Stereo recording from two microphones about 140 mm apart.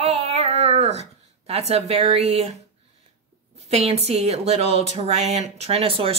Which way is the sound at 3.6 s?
50° right (ahead or behind).